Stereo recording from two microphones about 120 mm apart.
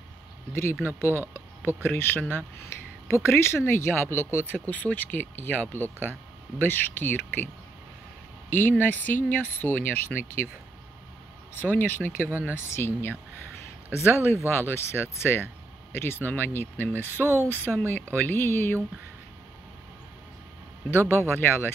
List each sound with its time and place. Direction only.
0.8 s speech: 20° left (ahead or behind)
8.5 s speech: 15° left (ahead or behind)
11.6 s speech: 15° left (ahead or behind)
12.3 s speech: 15° right (ahead or behind)
12.6 s speech: 20° left (ahead or behind)
20.9 s speech: 20° left (ahead or behind)